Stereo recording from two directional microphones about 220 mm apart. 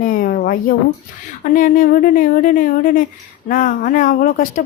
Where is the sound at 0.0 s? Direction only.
40° left (ahead or behind).